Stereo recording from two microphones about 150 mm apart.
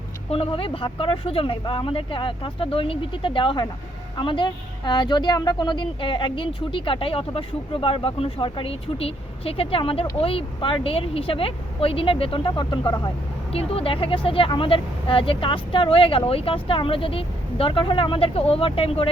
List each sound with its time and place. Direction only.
0.3 s speech: 40° left (ahead or behind)